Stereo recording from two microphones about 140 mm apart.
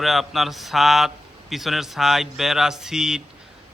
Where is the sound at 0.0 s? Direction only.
Centre (ahead or behind).